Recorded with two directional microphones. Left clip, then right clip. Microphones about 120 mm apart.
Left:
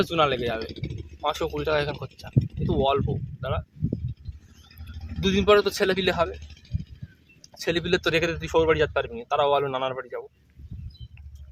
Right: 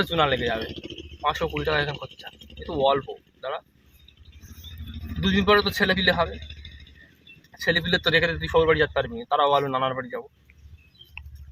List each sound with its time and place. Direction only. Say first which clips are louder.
0.0 s speech: even; 40° left (ahead or behind)
5.2 s speech: left 1 dB; 40° left (ahead or behind)
7.5 s speech: right 2 dB; 40° left (ahead or behind)